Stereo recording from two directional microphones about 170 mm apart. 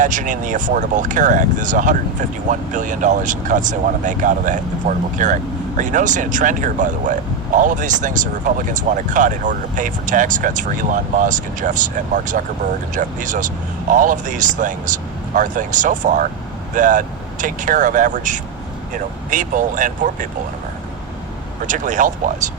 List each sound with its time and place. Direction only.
0.0 s speech: 50° right (ahead or behind)
21.7 s speech: 50° right (ahead or behind)